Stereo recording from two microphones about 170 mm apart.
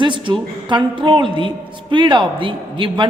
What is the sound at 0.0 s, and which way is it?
A woman's voice, 30° right (ahead or behind).